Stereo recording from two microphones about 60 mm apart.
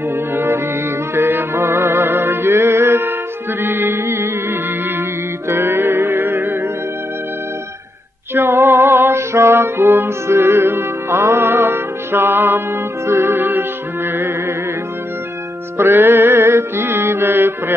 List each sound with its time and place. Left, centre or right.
0.1 s music: right
8.4 s music: right
15.8 s music: right